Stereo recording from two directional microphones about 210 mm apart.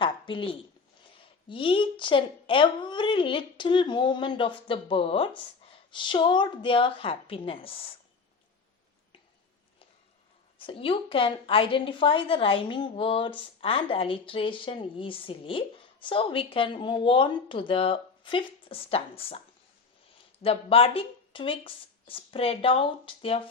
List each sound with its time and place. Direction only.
0.0 s a sound: 25° left (ahead or behind)
1.1 s a woman's voice: 25° left (ahead or behind)
10.6 s a woman's voice: 25° left (ahead or behind)
20.4 s a woman's voice: 25° left (ahead or behind)